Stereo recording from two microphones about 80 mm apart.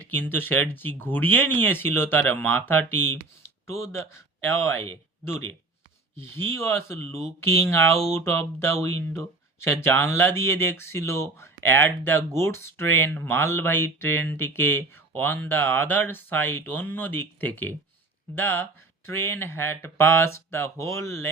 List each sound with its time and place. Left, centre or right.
0.2 s a man's voice: left
6.1 s speech: left